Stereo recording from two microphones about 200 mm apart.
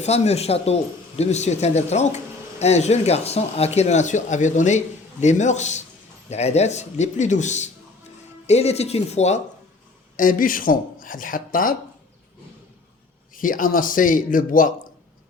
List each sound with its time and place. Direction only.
0.0 s a man's voice: 30° left (ahead or behind)
10.2 s speech: 45° left (ahead or behind)
13.3 s speech: 45° left (ahead or behind)